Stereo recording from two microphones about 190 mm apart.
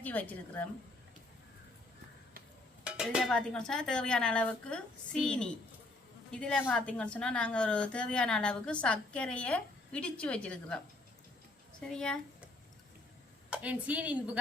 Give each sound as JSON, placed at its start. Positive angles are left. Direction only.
{"t": 0.0, "sound": "a woman's voice", "side_deg": 10}
{"t": 2.8, "sound": "a woman's voice", "side_deg": -5}
{"t": 11.9, "sound": "a woman's voice", "side_deg": 5}
{"t": 13.5, "sound": "a woman's voice", "side_deg": -5}